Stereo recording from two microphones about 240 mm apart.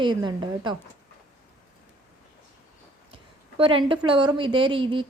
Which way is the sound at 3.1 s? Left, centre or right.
Right.